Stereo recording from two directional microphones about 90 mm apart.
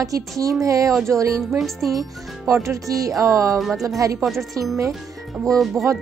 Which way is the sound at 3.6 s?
Centre (ahead or behind).